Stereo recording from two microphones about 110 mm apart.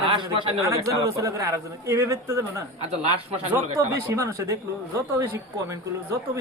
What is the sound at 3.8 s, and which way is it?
Speech, 25° right (ahead or behind).